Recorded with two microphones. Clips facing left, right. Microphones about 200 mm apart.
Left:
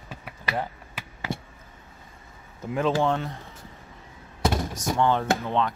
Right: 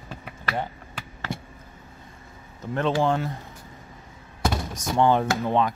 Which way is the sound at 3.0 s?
Centre (ahead or behind).